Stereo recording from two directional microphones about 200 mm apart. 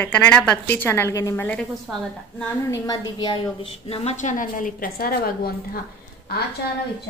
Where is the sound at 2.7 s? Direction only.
20° left (ahead or behind); by 5.8 s 50° left (ahead or behind).